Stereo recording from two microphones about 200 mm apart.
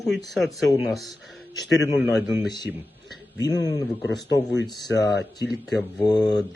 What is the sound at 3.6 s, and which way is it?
Speech, 15° left (ahead or behind).